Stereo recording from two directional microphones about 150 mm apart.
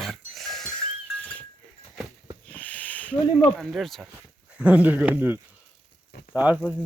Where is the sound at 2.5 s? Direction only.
10° left (ahead or behind).